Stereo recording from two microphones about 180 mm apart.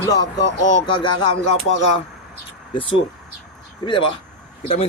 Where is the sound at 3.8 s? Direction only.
25° left (ahead or behind).